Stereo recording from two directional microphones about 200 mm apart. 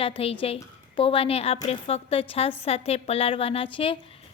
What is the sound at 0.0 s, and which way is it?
A woman's voice, 30° left (ahead or behind).